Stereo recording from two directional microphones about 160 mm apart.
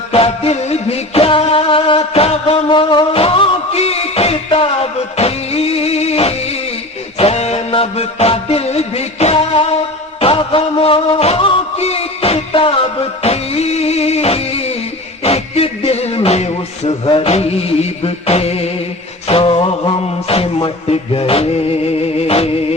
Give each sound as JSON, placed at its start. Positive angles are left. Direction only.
{"t": 0.1, "sound": "music", "side_deg": 40}